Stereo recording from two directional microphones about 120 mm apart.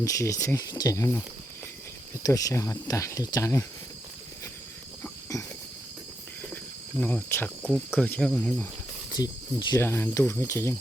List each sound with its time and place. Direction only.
0.0 s speech: 25° left (ahead or behind)
2.2 s speech: 30° left (ahead or behind)
5.3 s a sound: 30° left (ahead or behind)
7.0 s cricket: 15° left (ahead or behind)
8.3 s speech: 5° left (ahead or behind)
9.1 s speech: 35° left (ahead or behind)
9.7 s speech: 20° left (ahead or behind)